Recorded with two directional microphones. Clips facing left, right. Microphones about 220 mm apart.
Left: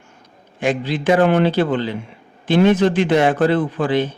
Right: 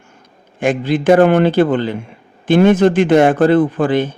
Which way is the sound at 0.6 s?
50° right (ahead or behind).